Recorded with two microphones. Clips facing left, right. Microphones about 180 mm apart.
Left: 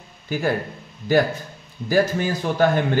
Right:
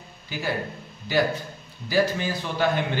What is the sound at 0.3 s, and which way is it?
Speech, 50° left (ahead or behind).